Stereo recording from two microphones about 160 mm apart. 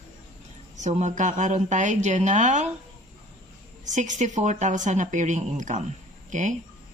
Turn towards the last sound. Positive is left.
turn(degrees=-50)  # may be behind; listen again after turning